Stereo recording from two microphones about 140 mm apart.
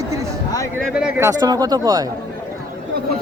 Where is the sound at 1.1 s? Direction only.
25° right (ahead or behind).